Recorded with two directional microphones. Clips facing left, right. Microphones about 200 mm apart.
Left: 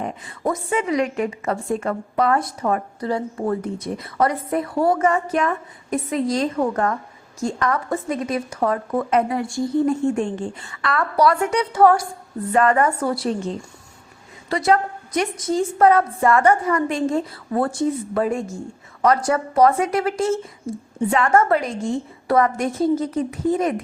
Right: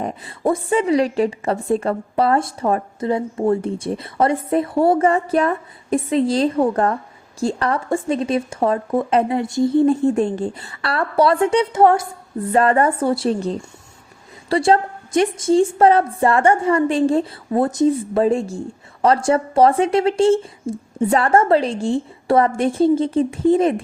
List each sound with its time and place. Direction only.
0.0 s a woman's voice: 30° right (ahead or behind)